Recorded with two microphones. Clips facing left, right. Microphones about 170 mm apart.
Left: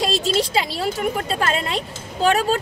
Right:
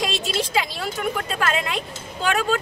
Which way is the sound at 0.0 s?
35° left (ahead or behind).